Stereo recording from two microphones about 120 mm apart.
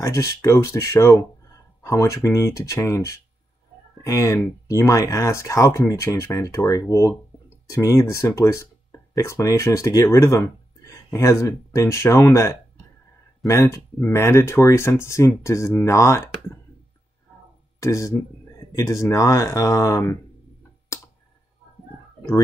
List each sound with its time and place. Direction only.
0.0 s speech: 25° left (ahead or behind)
17.7 s speech: 25° left (ahead or behind)